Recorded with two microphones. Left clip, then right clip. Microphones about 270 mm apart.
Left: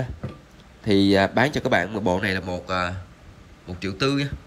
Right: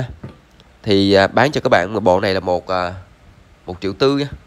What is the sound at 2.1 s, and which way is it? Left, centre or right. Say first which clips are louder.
A man's voice: right 9 dB; centre.